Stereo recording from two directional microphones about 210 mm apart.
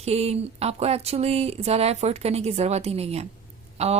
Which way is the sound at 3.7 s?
30° right (ahead or behind).